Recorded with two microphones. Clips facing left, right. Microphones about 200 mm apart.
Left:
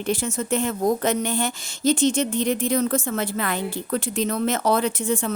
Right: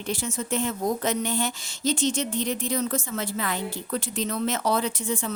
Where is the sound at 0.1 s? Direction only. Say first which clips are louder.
Left 4 dB; 50° left (ahead or behind).